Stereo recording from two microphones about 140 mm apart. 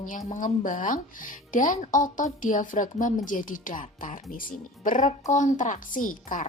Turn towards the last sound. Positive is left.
turn(degrees=70)  # may be behind; listen again after turning